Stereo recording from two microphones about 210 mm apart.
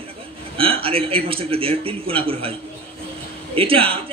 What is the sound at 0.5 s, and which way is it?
A man's voice, 25° right (ahead or behind).